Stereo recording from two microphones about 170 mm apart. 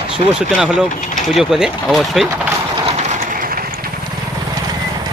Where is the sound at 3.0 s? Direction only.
55° right (ahead or behind).